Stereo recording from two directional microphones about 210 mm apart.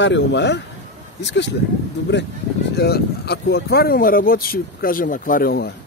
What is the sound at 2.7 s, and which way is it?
Speech, 50° left (ahead or behind).